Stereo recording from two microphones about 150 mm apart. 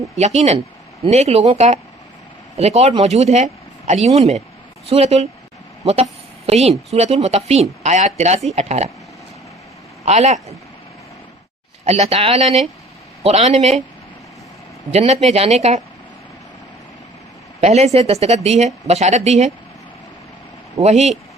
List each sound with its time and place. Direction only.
0.3 s a woman's voice: 45° right (ahead or behind)
10.1 s a woman's voice: 45° right (ahead or behind)
11.9 s a woman's voice: 45° right (ahead or behind)
14.9 s a woman's voice: 45° right (ahead or behind)
17.6 s a woman's voice: 45° right (ahead or behind)
20.8 s a woman's voice: 45° right (ahead or behind)